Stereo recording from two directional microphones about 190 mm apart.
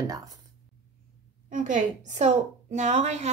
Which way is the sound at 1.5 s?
45° right (ahead or behind).